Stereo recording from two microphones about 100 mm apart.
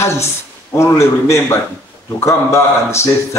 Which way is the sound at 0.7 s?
30° left (ahead or behind).